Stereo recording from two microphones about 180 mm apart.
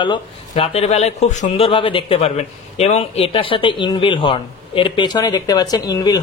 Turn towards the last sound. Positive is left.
turn(degrees=20)  # may be behind; listen again after turning